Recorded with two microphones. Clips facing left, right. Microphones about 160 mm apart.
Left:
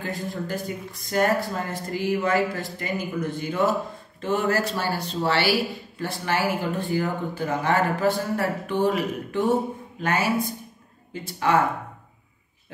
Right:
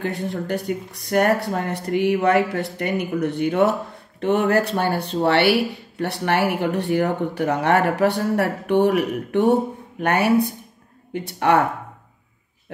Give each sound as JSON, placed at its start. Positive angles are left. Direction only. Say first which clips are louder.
{"t": 0.0, "sound": "speech", "louder": "right 4 dB", "side_deg": -65}